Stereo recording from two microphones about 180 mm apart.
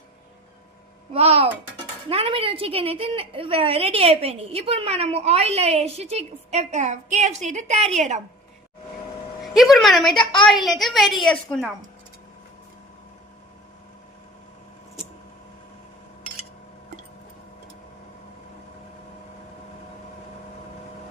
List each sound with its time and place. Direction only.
1.1 s a woman's voice: 35° right (ahead or behind)
9.4 s a woman's voice: centre (ahead or behind)